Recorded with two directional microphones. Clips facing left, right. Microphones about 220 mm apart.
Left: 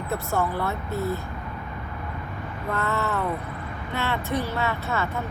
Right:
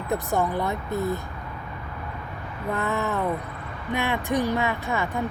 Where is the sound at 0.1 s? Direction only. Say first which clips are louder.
Right 2 dB; 15° right (ahead or behind).